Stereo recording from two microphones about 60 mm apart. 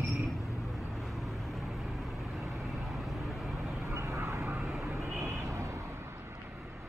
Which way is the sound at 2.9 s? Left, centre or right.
Centre.